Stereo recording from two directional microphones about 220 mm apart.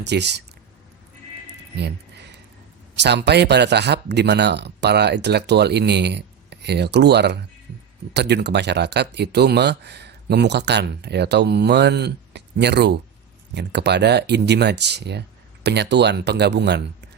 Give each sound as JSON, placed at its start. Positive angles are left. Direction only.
{"t": 0.0, "sound": "speech", "side_deg": -50}
{"t": 1.7, "sound": "a sound", "side_deg": -50}
{"t": 2.9, "sound": "speech", "side_deg": -50}